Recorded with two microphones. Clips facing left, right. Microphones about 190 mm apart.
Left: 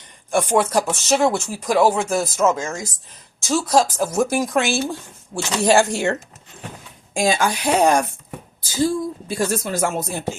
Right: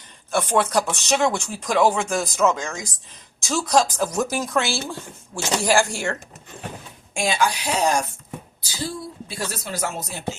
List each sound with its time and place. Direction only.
0.3 s speech: 10° left (ahead or behind)
7.1 s speech: 40° left (ahead or behind)